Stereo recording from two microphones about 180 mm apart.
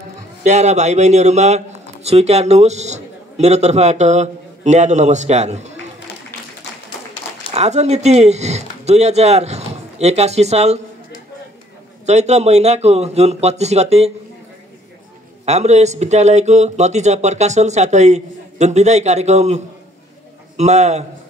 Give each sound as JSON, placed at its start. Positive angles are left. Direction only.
{"t": 0.4, "sound": "a man's voice", "side_deg": -40}
{"t": 7.5, "sound": "speech", "side_deg": -40}
{"t": 12.1, "sound": "speech", "side_deg": -40}
{"t": 15.4, "sound": "speech", "side_deg": -40}